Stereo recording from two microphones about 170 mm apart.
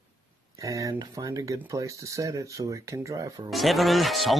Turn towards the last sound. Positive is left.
turn(degrees=0)  # may be behind; listen again after turning